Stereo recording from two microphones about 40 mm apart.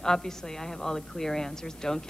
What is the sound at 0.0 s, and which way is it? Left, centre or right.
A woman's voice, centre.